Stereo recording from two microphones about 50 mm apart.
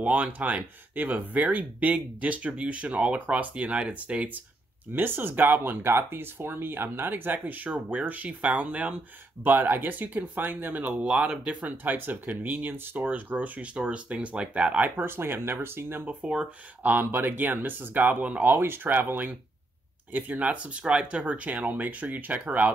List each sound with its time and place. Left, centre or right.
0.0 s speech: right
4.9 s speech: right
9.4 s speech: right
11.1 s speech: centre
11.7 s speech: right
15.0 s speech: right
16.1 s speech: right
16.8 s speech: right
20.4 s speech: right